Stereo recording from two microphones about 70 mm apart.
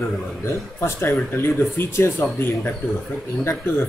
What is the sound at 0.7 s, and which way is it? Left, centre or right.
Speech, left.